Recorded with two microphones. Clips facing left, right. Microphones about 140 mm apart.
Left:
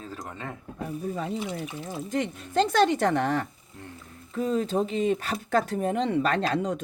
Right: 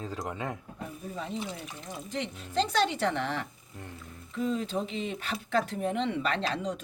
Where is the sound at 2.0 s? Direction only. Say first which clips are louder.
Left 6 dB; 45° left (ahead or behind).